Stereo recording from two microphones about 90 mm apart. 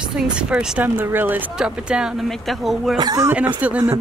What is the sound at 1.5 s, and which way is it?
Speech, 10° right (ahead or behind).